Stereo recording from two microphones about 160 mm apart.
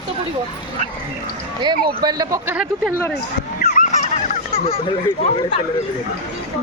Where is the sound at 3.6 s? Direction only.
60° left (ahead or behind); by 4.8 s 40° left (ahead or behind).